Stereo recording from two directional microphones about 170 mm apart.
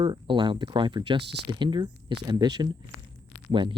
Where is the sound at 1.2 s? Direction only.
80° right.